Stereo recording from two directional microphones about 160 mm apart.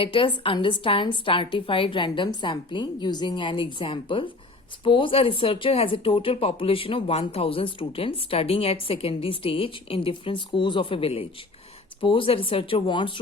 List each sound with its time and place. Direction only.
0.0 s speech: 35° left (ahead or behind)